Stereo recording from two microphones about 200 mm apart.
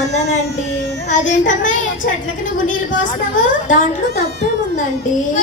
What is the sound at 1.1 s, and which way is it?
A woman's voice, 40° left (ahead or behind).